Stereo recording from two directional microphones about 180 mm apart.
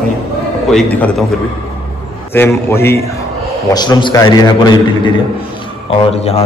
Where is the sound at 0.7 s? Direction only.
5° left (ahead or behind).